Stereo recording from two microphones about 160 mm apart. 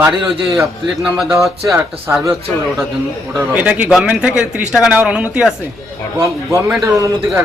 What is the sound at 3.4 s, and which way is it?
Speech, 10° right (ahead or behind).